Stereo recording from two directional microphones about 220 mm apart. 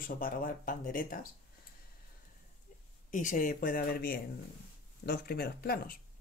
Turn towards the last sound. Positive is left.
turn(degrees=45)  # may be behind; listen again after turning